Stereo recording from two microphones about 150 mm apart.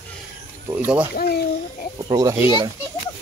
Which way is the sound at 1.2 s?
85° left.